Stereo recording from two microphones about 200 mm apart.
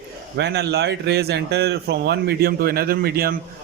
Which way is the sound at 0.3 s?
55° right (ahead or behind).